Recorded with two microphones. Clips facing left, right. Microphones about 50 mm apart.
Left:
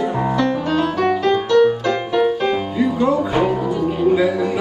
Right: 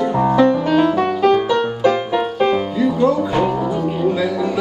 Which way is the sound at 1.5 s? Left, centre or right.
Centre.